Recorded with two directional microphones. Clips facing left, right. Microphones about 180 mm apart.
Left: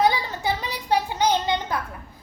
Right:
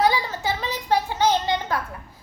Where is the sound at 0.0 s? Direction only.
15° left (ahead or behind).